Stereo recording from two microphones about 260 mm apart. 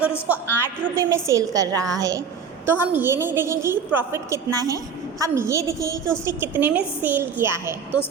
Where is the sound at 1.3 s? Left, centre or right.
Centre.